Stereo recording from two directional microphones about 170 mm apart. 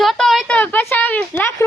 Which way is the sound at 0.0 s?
Centre (ahead or behind).